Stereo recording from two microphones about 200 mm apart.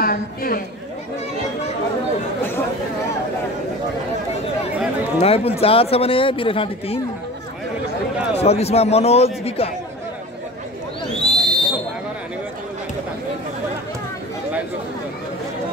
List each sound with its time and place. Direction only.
0.0 s a man's voice: 45° left (ahead or behind)
5.2 s speech: 30° left (ahead or behind)
8.4 s a man's voice: 30° left (ahead or behind)
11.1 s a sound: centre (ahead or behind)